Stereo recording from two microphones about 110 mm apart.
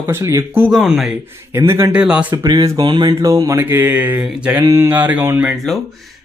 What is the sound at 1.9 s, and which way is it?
Mantra, 10° right (ahead or behind).